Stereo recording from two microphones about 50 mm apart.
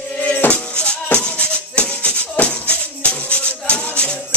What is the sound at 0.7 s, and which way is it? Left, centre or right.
Music, left.